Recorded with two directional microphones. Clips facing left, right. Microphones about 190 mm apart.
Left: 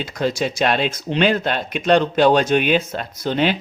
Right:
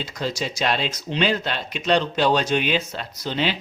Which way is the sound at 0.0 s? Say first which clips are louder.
Left 6 dB; 55° left (ahead or behind).